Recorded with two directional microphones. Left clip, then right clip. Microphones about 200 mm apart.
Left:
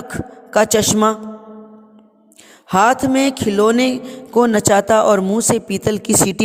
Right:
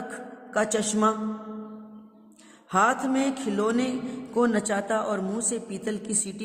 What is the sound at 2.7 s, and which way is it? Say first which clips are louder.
A man's voice: left 9 dB; 40° left (ahead or behind).